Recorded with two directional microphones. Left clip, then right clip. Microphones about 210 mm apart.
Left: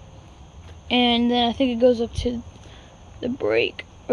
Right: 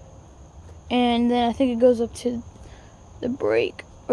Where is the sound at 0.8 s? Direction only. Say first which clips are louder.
Left 2 dB; 5° right (ahead or behind).